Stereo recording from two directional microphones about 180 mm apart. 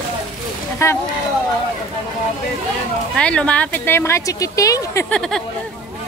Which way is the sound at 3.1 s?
5° left (ahead or behind).